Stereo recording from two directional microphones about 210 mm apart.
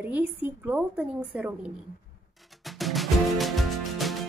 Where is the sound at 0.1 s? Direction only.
10° right (ahead or behind).